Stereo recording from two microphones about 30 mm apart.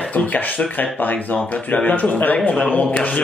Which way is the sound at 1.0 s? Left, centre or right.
Left.